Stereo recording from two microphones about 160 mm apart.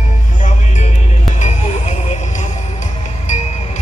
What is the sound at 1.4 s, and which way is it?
Music, 45° left (ahead or behind).